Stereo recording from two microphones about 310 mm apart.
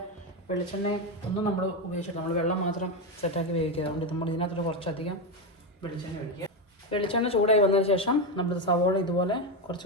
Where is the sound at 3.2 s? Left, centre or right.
Centre.